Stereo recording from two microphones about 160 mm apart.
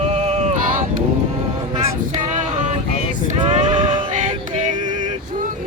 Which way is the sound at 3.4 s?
35° right (ahead or behind).